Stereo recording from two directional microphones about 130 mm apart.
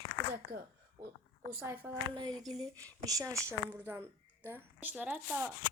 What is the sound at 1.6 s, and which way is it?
Speech, 20° right (ahead or behind).